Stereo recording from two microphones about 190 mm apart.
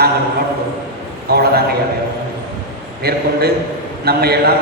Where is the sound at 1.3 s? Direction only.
55° right (ahead or behind).